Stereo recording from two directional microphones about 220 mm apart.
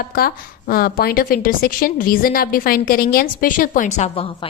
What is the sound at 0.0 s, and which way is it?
A woman's voice, 45° left (ahead or behind).